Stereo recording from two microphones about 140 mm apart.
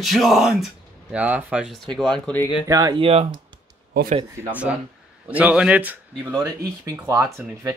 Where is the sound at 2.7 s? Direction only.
25° right (ahead or behind).